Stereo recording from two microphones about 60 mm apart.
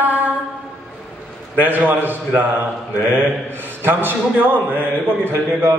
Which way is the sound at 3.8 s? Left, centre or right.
Right.